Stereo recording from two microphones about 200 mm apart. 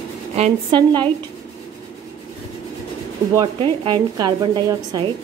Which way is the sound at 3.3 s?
20° right (ahead or behind).